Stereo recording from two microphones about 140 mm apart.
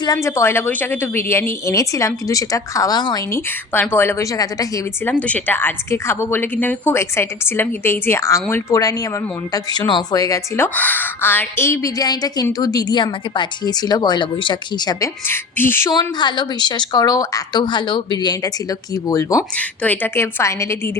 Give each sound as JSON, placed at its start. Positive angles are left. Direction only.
{"t": 0.0, "sound": "a woman's voice", "side_deg": 25}
{"t": 3.7, "sound": "a woman's voice", "side_deg": 15}
{"t": 5.0, "sound": "a woman's voice", "side_deg": 10}
{"t": 10.8, "sound": "a woman's voice", "side_deg": 10}
{"t": 15.3, "sound": "a woman's voice", "side_deg": 15}
{"t": 15.9, "sound": "a woman's voice", "side_deg": 30}
{"t": 19.5, "sound": "a woman's voice", "side_deg": 10}